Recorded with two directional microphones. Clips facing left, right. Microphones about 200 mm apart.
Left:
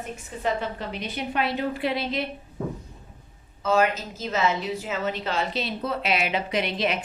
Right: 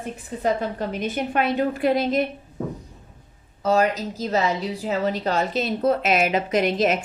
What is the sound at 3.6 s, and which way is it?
A woman's voice, 35° right (ahead or behind).